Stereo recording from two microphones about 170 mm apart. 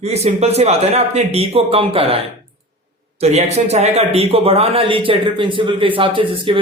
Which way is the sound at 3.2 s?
40° right (ahead or behind).